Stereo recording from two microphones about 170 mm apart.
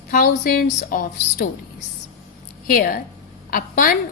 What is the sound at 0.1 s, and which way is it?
A woman's voice, 60° left (ahead or behind).